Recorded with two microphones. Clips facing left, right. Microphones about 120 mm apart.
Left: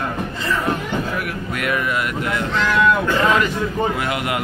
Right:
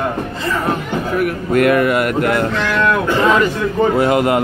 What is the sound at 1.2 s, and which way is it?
Speech, 50° right (ahead or behind).